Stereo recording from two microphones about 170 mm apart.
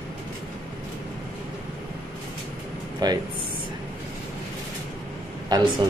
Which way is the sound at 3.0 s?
25° right (ahead or behind).